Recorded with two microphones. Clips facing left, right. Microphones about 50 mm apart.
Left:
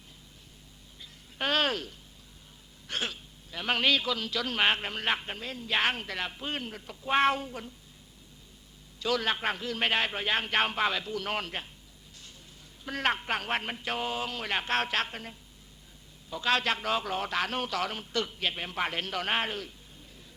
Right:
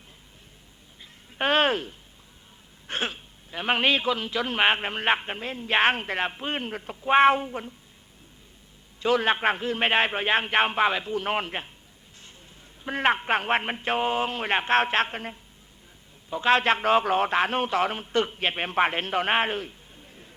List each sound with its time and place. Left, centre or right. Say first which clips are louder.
0.9 s a sound: right 6 dB; right
2.8 s a man's voice: right 4 dB; right
9.0 s a man's voice: right 6 dB; right
12.8 s a man's voice: right 6 dB; right